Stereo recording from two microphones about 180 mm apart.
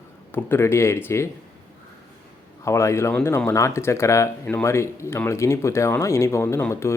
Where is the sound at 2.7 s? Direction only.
15° left (ahead or behind).